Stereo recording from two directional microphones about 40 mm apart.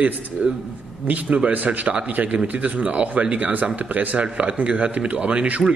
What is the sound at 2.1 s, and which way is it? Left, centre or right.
A man's voice, right.